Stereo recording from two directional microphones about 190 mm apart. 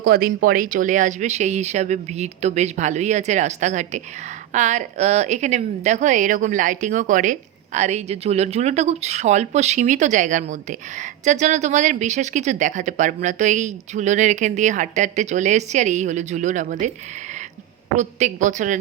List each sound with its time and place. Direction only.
0.0 s a woman's voice: 50° right (ahead or behind)
17.9 s a woman's voice: 40° right (ahead or behind)